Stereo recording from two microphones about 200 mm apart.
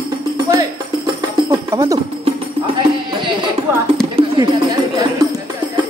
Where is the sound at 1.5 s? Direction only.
15° right (ahead or behind).